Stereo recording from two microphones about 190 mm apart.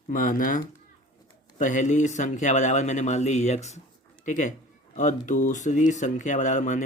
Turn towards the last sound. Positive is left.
turn(degrees=40)  # may be behind; listen again after turning